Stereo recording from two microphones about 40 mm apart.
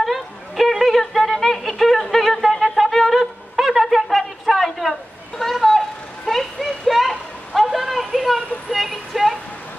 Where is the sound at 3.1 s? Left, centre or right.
Centre.